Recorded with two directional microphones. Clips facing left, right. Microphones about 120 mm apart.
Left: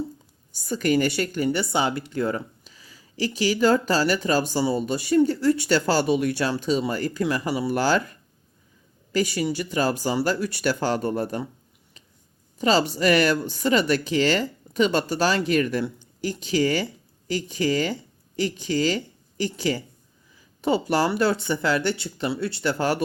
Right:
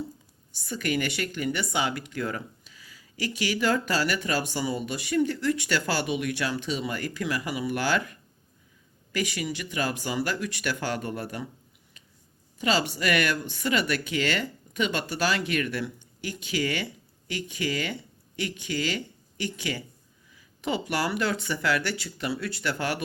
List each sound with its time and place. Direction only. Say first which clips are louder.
0.5 s a woman's voice: left 7 dB; 40° left (ahead or behind)
12.5 s a woman's voice: left 5 dB; 35° left (ahead or behind)